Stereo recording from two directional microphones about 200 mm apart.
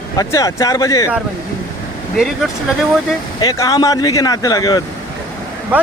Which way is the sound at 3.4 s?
20° left (ahead or behind).